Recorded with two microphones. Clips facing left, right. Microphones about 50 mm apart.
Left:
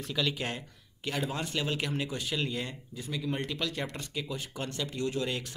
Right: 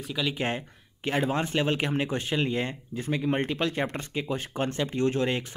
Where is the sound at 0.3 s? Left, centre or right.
Right.